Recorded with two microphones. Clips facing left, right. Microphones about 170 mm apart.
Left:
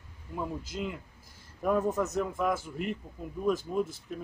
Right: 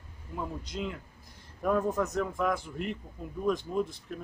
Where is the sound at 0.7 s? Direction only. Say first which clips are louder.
Even; 5° left (ahead or behind).